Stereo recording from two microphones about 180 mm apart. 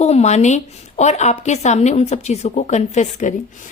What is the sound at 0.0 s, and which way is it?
A woman's voice, 40° left (ahead or behind).